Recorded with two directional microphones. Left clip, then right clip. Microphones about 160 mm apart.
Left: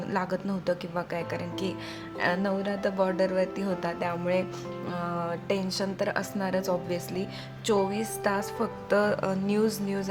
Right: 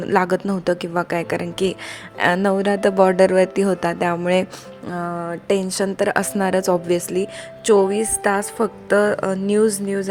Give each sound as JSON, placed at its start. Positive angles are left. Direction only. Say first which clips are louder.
{"t": 0.0, "sound": "a woman's voice", "louder": "right 12 dB", "side_deg": -55}
{"t": 2.1, "sound": "music", "louder": "right 10 dB", "side_deg": -55}
{"t": 4.9, "sound": "music", "louder": "right 7 dB", "side_deg": -35}
{"t": 5.5, "sound": "a woman's voice", "louder": "right 14 dB", "side_deg": -45}